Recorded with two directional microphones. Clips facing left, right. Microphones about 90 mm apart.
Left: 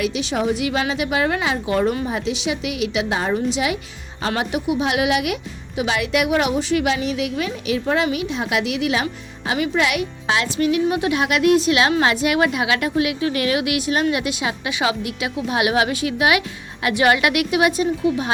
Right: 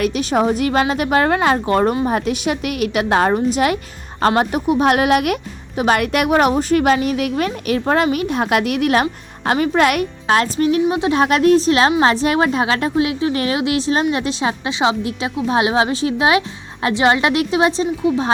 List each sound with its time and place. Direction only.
0.0 s speech: 45° right (ahead or behind)
10.8 s a woman's voice: 25° right (ahead or behind)